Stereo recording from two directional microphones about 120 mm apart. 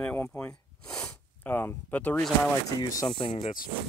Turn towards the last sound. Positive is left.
turn(degrees=45)  # may be behind; listen again after turning